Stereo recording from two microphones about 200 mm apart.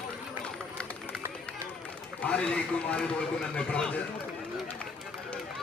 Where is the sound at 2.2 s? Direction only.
5° left (ahead or behind).